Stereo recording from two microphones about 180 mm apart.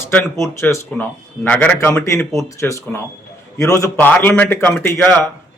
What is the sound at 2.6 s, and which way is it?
A man's voice, 15° left (ahead or behind).